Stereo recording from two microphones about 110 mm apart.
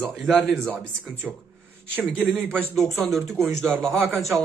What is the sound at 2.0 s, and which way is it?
Speech, 15° right (ahead or behind).